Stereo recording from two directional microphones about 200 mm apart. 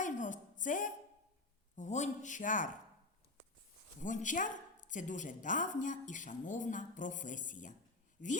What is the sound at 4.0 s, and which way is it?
A woman's voice, 40° left (ahead or behind).